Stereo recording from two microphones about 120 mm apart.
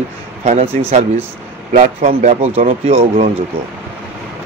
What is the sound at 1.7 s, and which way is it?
Speech, 90° right.